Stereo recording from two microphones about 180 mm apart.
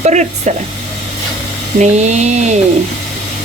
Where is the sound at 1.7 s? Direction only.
40° right (ahead or behind).